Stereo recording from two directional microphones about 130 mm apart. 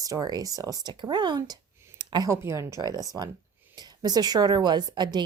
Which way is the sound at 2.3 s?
20° right (ahead or behind).